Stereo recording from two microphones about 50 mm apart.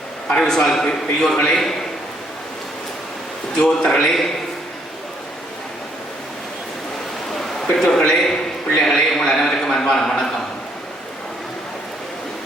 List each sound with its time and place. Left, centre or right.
0.3 s a man's voice: centre
3.6 s a man's voice: centre
7.3 s a sound: centre